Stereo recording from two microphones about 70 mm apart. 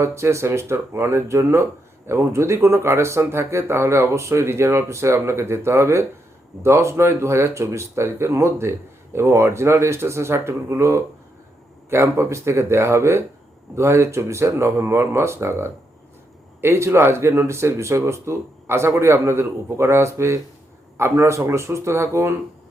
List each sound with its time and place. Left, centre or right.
0.0 s speech: right